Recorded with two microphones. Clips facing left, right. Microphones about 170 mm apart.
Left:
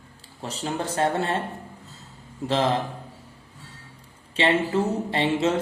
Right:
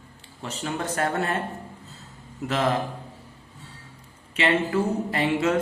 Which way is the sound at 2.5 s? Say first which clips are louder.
Left 2 dB; 30° left (ahead or behind).